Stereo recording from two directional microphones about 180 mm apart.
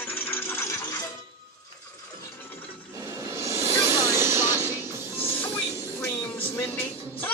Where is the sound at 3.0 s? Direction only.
15° right (ahead or behind).